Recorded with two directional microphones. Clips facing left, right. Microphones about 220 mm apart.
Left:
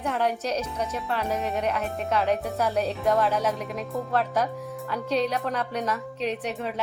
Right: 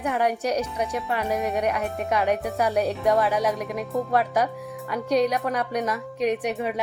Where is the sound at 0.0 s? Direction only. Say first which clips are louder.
Right 2 dB; 15° right (ahead or behind).